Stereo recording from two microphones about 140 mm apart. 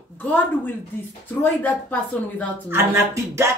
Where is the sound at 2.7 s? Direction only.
20° right (ahead or behind).